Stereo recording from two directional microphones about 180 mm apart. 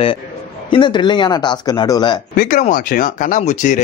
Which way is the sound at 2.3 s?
45° left (ahead or behind).